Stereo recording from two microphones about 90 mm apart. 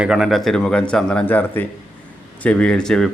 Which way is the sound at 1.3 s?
20° left (ahead or behind).